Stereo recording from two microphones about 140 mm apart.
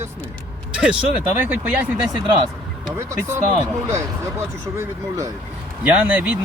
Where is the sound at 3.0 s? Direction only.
20° right (ahead or behind).